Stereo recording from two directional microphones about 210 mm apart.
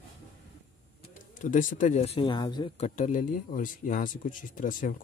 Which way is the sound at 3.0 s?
35° left (ahead or behind).